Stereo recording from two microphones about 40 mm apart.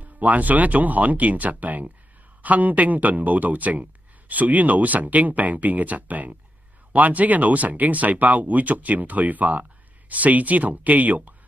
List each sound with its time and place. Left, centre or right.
0.0 s speech: right